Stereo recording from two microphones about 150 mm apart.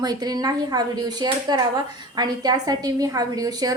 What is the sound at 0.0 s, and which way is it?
A woman's voice, 25° right (ahead or behind).